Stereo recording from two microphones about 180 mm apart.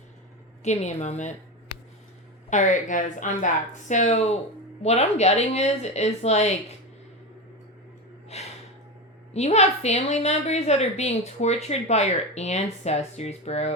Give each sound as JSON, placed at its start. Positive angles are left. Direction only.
{"t": 0.6, "sound": "a woman's voice", "side_deg": 40}
{"t": 2.5, "sound": "a woman's voice", "side_deg": 45}
{"t": 8.3, "sound": "gasp", "side_deg": 35}
{"t": 9.3, "sound": "a woman's voice", "side_deg": 35}